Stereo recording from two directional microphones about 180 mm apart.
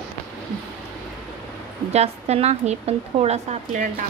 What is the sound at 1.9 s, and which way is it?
A woman's voice, 35° right (ahead or behind).